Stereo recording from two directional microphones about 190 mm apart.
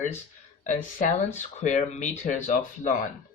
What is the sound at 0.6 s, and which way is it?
Speech, 40° left (ahead or behind).